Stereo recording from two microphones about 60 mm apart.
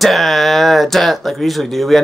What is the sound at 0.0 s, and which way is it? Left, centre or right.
Speech, centre.